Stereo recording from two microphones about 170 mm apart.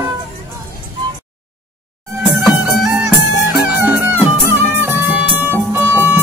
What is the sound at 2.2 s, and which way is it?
Music, centre (ahead or behind).